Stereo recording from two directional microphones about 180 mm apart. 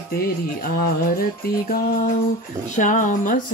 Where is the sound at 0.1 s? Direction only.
55° left (ahead or behind).